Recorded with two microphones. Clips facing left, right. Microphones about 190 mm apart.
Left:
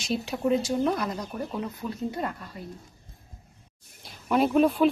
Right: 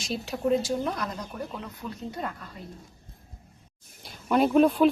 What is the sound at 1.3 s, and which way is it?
Speech, 20° left (ahead or behind).